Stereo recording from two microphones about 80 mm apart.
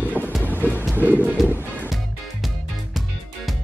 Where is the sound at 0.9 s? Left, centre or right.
Right.